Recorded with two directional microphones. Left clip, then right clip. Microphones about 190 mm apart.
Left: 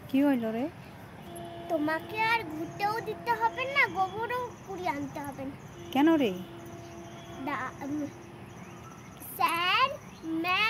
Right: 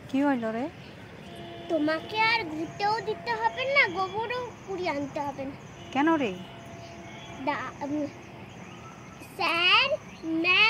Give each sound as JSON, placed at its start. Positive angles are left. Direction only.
{"t": 0.1, "sound": "speech", "side_deg": 20}
{"t": 1.7, "sound": "a child's voice", "side_deg": 20}
{"t": 7.4, "sound": "a child's voice", "side_deg": 20}
{"t": 9.4, "sound": "a child's voice", "side_deg": 20}